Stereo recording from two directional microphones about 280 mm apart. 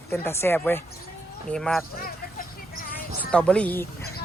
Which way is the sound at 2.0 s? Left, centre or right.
Left.